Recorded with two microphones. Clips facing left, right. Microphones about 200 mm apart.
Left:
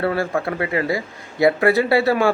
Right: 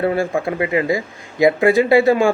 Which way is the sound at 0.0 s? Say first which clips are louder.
Right 3 dB; 20° right (ahead or behind).